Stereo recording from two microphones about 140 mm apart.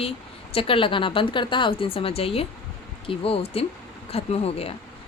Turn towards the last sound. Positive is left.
turn(degrees=45)  # may be behind; listen again after turning